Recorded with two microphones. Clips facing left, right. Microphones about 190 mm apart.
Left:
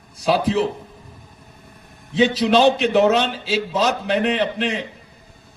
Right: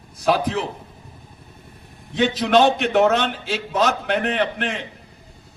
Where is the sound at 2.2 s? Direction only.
55° right (ahead or behind).